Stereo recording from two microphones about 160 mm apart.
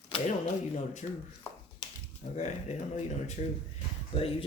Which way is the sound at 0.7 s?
50° left (ahead or behind).